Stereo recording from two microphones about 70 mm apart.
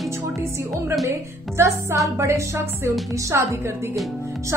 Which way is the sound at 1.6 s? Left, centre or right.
Right.